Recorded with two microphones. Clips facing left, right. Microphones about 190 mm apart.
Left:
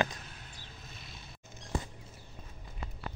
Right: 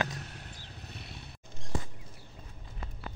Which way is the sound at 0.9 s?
65° right (ahead or behind).